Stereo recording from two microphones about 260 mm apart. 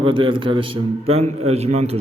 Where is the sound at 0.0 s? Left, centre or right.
Centre.